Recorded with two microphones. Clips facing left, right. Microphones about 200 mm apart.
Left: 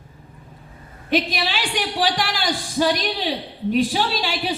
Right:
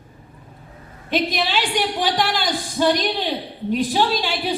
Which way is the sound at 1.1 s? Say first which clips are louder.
Even; 50° right (ahead or behind).